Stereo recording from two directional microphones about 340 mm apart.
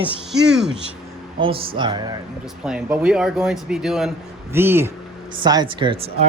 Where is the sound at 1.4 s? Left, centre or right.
Centre.